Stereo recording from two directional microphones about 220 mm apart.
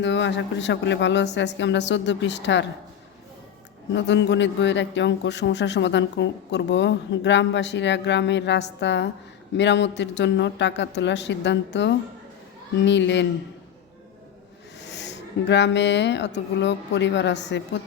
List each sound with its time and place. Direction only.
0.0 s a man's voice: 55° left (ahead or behind)
3.9 s a man's voice: 55° left (ahead or behind)
14.8 s speech: 50° left (ahead or behind)